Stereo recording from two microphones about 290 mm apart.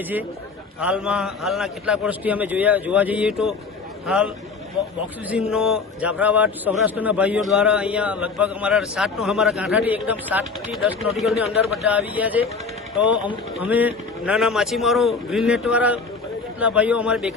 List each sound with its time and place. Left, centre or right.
0.8 s a man's voice: centre
5.3 s a man's voice: centre
13.1 s speech: centre
13.6 s a man's voice: centre